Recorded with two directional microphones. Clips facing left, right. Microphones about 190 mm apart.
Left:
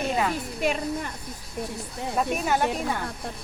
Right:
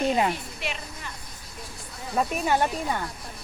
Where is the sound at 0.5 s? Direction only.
45° left (ahead or behind).